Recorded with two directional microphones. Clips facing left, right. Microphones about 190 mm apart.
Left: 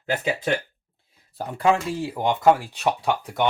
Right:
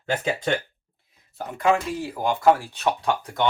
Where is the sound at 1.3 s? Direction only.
30° left (ahead or behind); by 3.5 s 10° left (ahead or behind).